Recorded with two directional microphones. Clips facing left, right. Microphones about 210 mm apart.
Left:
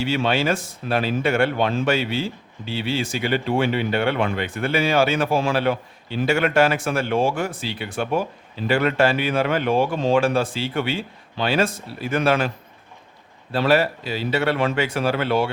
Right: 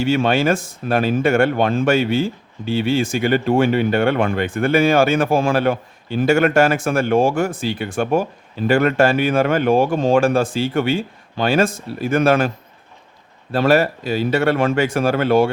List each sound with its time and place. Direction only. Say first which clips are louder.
0.0 s speech: right 5 dB; 50° right (ahead or behind)
13.5 s speech: right 3 dB; 45° right (ahead or behind)